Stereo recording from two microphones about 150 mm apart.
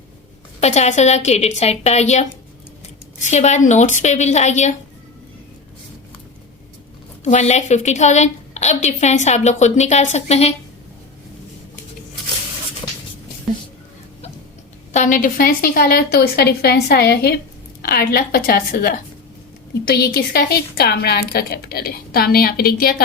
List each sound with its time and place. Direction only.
0.6 s a woman's voice: 50° left (ahead or behind)
7.3 s a woman's voice: 50° left (ahead or behind)
14.9 s a woman's voice: 60° left (ahead or behind); by 23.0 s 90° left